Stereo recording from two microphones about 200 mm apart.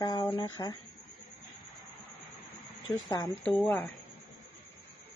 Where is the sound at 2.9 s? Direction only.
20° left (ahead or behind).